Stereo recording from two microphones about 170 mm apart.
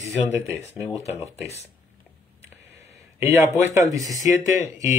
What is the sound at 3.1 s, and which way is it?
Speech, 15° right (ahead or behind).